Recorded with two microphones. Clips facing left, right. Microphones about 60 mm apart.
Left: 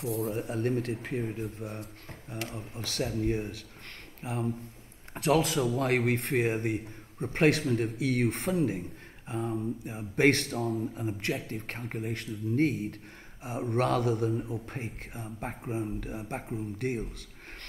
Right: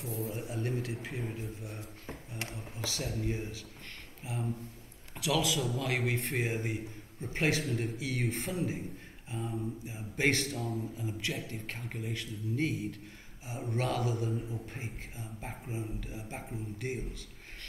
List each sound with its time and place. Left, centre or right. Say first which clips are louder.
0.0 s a man's voice: left 6 dB; left